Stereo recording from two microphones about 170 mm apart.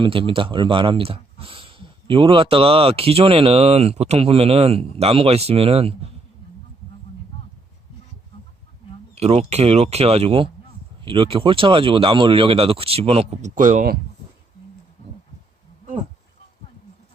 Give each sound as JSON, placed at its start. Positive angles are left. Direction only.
{"t": 0.0, "sound": "speech", "side_deg": -30}
{"t": 9.1, "sound": "speech", "side_deg": -40}